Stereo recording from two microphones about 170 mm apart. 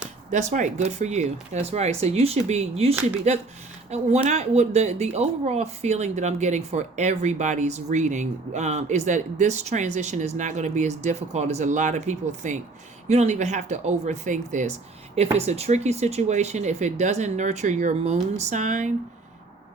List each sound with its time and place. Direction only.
0.3 s a woman's voice: 45° right (ahead or behind)